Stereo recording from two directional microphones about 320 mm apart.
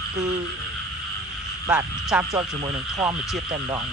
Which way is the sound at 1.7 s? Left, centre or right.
Centre.